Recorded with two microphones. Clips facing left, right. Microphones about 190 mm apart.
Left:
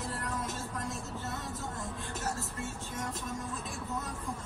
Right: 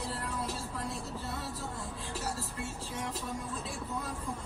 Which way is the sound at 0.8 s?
45° left (ahead or behind).